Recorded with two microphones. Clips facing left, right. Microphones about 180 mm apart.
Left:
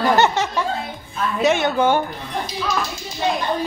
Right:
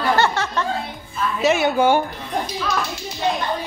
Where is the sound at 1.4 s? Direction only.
5° right (ahead or behind).